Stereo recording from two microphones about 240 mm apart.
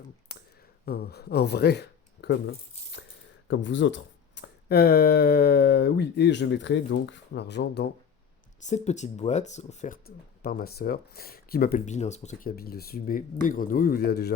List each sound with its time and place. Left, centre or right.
0.9 s speech: left
8.6 s speech: left